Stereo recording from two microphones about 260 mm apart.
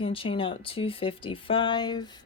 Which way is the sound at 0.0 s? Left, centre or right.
Centre.